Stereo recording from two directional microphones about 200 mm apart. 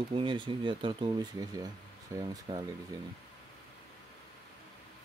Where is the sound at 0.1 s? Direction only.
25° right (ahead or behind).